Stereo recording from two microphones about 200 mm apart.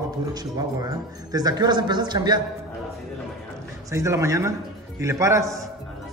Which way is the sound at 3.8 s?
15° right (ahead or behind).